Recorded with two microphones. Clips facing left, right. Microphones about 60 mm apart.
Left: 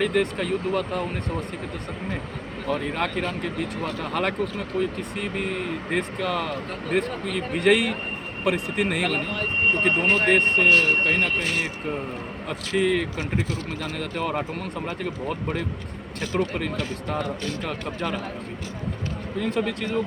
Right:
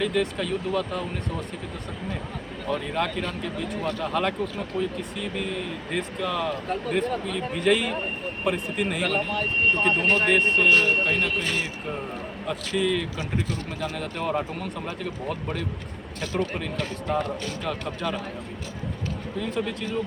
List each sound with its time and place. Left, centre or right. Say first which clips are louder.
0.0 s speech: left 2 dB; left
2.8 s speech: left 1 dB; left
9.8 s speech: left 2 dB; left
19.4 s speech: left 4 dB; left